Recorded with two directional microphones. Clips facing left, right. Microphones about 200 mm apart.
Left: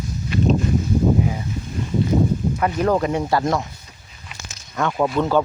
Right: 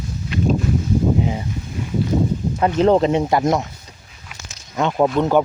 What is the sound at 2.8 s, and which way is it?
Speech, 25° right (ahead or behind).